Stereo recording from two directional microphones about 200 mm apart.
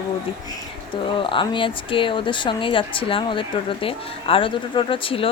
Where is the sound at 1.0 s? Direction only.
25° left (ahead or behind).